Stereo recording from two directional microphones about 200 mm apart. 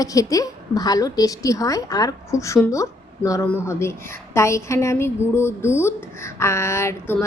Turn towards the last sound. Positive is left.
turn(degrees=10)  # may be behind; listen again after turning